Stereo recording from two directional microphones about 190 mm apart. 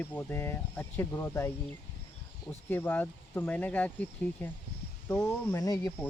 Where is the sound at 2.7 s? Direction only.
10° left (ahead or behind).